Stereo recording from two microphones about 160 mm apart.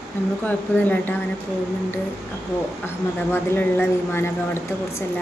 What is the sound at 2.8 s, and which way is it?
Speech, 15° left (ahead or behind).